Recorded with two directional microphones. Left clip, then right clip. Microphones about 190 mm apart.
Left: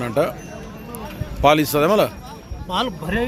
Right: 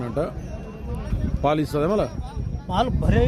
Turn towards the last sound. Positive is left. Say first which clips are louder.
# even
turn(degrees=-55)  # may be behind; listen again after turning